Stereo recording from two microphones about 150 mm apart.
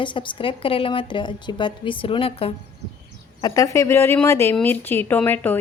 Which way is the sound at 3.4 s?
25° left (ahead or behind).